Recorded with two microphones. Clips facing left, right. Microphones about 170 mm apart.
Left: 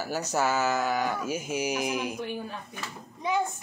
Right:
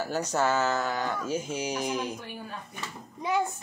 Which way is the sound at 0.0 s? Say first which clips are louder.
Right 1 dB; 5° left (ahead or behind).